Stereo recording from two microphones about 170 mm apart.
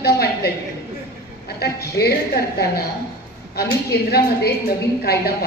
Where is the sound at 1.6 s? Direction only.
70° left (ahead or behind).